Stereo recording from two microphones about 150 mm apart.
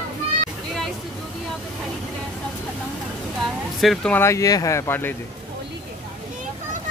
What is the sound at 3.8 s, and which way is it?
Speech, 5° left (ahead or behind).